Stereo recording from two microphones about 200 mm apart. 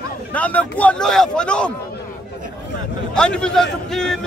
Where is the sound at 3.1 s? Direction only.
5° left (ahead or behind).